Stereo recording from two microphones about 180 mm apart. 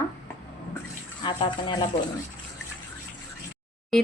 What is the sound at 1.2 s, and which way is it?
Speech, 25° left (ahead or behind).